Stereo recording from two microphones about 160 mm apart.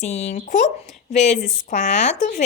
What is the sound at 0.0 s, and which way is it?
A woman's voice, 45° left (ahead or behind).